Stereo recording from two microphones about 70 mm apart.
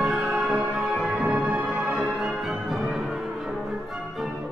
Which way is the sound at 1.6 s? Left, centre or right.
Centre.